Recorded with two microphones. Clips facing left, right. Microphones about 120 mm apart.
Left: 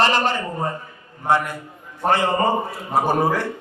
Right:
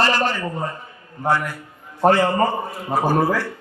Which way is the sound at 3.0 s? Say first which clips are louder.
Right 2 dB; 20° left (ahead or behind).